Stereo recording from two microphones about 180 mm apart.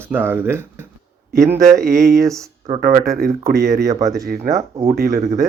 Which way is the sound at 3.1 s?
55° right (ahead or behind).